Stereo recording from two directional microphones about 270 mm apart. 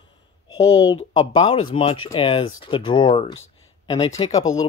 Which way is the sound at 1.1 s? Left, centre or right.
Left.